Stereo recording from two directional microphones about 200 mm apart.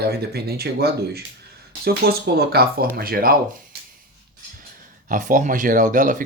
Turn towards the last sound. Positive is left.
turn(degrees=-40)  # may be behind; listen again after turning